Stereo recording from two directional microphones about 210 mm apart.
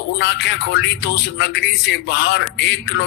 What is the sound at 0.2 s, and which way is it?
A man's voice, 55° left (ahead or behind).